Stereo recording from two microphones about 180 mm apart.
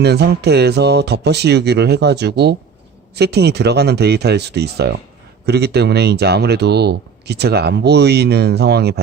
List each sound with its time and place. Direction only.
0.0 s speech: 65° right (ahead or behind)